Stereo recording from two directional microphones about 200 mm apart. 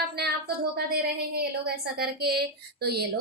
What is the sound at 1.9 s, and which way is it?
Speech, 50° right (ahead or behind).